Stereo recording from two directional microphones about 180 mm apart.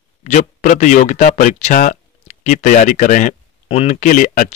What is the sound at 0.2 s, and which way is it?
A man's voice, 40° left (ahead or behind).